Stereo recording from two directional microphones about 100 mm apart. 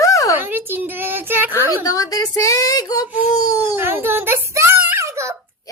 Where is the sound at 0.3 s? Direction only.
20° right (ahead or behind).